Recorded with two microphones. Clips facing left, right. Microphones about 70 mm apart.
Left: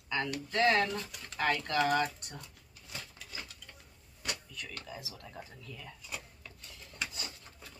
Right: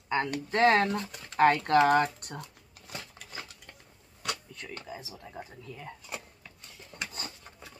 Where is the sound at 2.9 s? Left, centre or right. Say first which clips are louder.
Right 3 dB; right.